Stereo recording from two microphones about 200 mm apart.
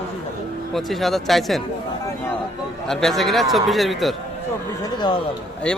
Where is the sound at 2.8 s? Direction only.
Centre (ahead or behind).